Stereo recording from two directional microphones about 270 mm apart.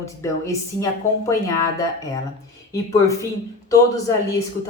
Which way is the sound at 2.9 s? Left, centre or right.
Centre.